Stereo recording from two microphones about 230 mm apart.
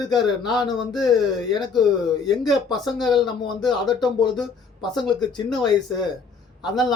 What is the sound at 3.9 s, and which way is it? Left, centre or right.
Speech, centre.